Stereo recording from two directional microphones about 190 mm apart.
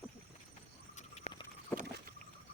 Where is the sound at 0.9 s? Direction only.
35° left (ahead or behind).